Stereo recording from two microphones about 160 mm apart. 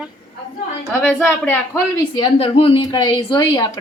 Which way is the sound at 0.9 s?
10° left (ahead or behind).